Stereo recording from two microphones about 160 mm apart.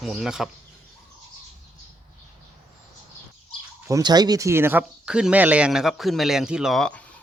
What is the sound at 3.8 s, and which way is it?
Speech, 20° right (ahead or behind).